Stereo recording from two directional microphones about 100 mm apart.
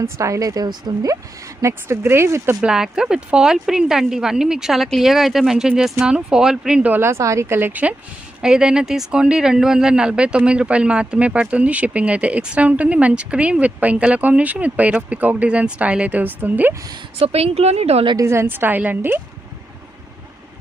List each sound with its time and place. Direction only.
0.0 s speech: 30° right (ahead or behind)
1.6 s a woman's voice: 25° right (ahead or behind)
2.6 s a woman's voice: 5° right (ahead or behind)
6.9 s a woman's voice: 25° right (ahead or behind)
17.2 s a woman's voice: 85° right
18.2 s a woman's voice: 25° right (ahead or behind)